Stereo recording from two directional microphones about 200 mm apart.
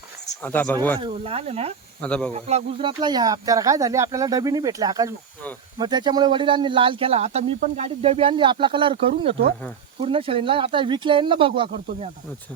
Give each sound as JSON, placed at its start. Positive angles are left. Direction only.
{"t": 0.4, "sound": "speech", "side_deg": 10}
{"t": 0.9, "sound": "speech", "side_deg": -25}
{"t": 2.0, "sound": "speech", "side_deg": 5}
{"t": 2.3, "sound": "speech", "side_deg": -30}